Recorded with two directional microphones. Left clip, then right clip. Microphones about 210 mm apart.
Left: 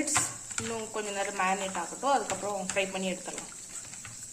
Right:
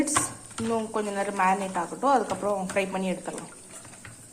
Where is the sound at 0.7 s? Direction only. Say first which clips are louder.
Right 8 dB; 15° right (ahead or behind).